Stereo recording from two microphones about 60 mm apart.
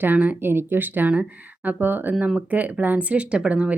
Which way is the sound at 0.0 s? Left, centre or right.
Right.